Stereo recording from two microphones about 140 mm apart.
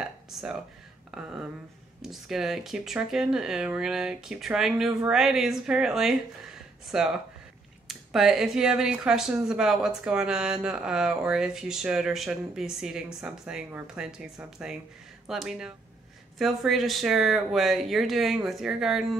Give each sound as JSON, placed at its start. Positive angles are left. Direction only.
{"t": 0.3, "sound": "speech", "side_deg": -5}